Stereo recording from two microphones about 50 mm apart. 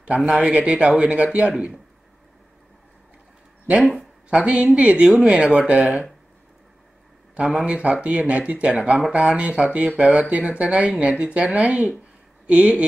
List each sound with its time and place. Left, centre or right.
0.0 s speech: right
4.3 s speech: right
7.3 s speech: right